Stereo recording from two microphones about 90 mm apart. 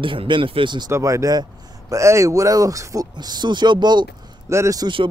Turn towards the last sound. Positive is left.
turn(degrees=-35)  # may be behind; listen again after turning